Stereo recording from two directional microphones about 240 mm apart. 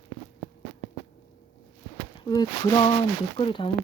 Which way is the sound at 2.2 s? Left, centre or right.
Centre.